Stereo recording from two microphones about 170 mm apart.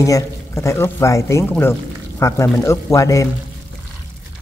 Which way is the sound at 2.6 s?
15° left (ahead or behind).